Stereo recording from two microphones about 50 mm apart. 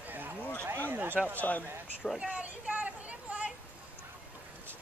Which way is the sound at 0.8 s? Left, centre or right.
Right.